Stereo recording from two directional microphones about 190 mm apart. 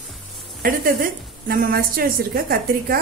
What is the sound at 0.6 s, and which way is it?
A woman's voice, 50° right (ahead or behind).